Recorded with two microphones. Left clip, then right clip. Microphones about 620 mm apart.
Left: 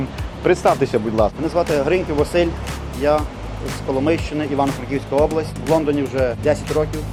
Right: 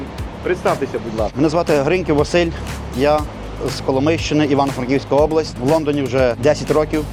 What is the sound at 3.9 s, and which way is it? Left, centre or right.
Speech, right.